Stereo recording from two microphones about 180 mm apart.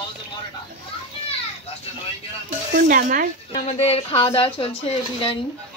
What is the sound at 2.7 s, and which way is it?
Speech, 50° right (ahead or behind).